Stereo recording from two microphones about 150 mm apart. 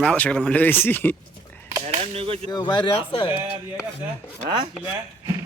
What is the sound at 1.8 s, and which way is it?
Speech, 45° right (ahead or behind).